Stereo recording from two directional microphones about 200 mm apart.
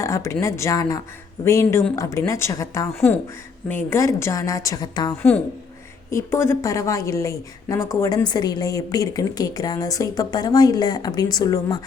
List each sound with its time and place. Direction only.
0.0 s a woman's voice: 15° left (ahead or behind)